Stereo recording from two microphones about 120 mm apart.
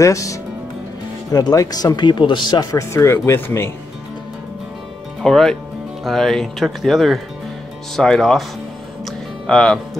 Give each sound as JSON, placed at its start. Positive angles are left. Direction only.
{"t": 0.0, "sound": "speech", "side_deg": 25}
{"t": 5.2, "sound": "speech", "side_deg": 5}
{"t": 9.0, "sound": "music", "side_deg": 5}